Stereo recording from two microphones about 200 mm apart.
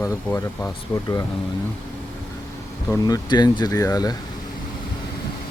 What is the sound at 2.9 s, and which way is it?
Speech, 20° left (ahead or behind).